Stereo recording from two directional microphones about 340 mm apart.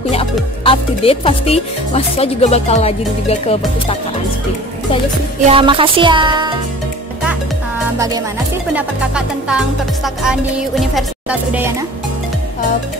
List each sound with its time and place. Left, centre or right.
0.1 s music: centre
5.5 s speech: centre
8.7 s speech: centre